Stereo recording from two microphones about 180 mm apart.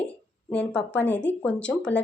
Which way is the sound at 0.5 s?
5° left (ahead or behind).